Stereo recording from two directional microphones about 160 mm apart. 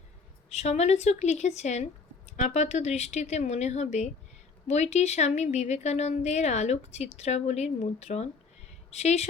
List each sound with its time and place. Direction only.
0.5 s a woman's voice: 45° left (ahead or behind)